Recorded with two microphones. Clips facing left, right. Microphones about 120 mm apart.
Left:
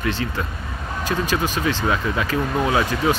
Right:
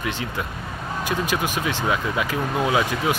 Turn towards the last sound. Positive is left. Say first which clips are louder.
# left 2 dB
turn(degrees=-15)  # may be behind; listen again after turning